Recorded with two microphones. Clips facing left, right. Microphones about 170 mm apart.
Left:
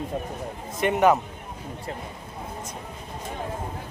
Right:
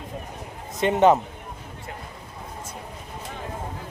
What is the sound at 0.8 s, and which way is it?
Speech, 25° right (ahead or behind).